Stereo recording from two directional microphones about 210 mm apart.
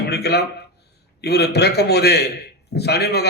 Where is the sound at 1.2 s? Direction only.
50° left (ahead or behind).